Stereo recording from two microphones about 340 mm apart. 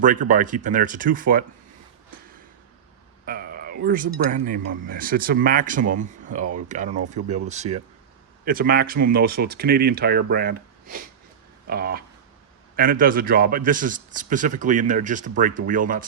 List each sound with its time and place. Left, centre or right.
0.0 s speech: right
3.2 s speech: right